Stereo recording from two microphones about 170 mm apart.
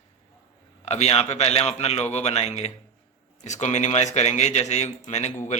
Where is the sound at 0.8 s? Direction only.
40° left (ahead or behind).